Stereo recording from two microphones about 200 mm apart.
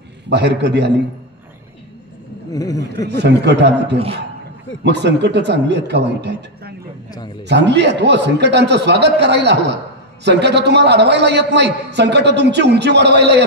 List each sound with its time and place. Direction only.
0.3 s a man's voice: 60° right (ahead or behind)
2.5 s speech: 15° left (ahead or behind)
3.1 s a man's voice: 55° right (ahead or behind)